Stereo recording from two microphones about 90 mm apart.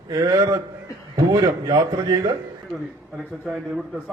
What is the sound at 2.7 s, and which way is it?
A man's voice, centre (ahead or behind).